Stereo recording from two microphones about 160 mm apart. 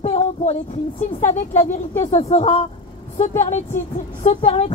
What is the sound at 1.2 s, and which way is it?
A woman's voice, 50° left (ahead or behind).